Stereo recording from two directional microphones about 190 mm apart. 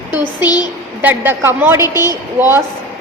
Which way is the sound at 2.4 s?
10° right (ahead or behind).